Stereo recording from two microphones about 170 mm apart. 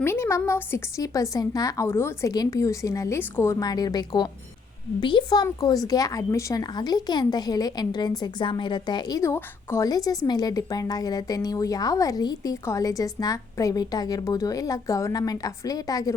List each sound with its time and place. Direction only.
0.0 s a woman's voice: 15° left (ahead or behind)